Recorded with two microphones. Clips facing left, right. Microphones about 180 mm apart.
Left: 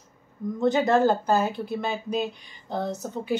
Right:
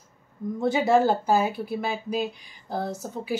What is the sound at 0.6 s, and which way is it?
A woman's voice, 10° right (ahead or behind).